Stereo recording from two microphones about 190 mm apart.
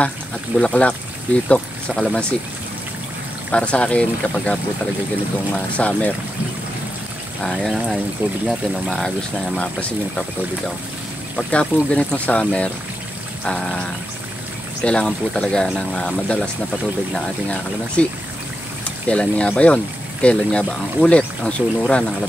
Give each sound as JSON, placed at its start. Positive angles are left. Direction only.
{"t": 0.6, "sound": "speech", "side_deg": 5}
{"t": 3.5, "sound": "speech", "side_deg": 5}
{"t": 7.4, "sound": "speech", "side_deg": 0}
{"t": 11.3, "sound": "speech", "side_deg": 5}
{"t": 14.8, "sound": "speech", "side_deg": 5}
{"t": 19.0, "sound": "speech", "side_deg": 5}